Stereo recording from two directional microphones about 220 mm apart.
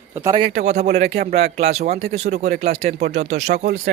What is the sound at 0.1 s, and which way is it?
Speech, 10° right (ahead or behind).